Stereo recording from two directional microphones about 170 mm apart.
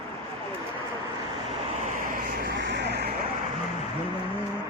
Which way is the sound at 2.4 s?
90° right.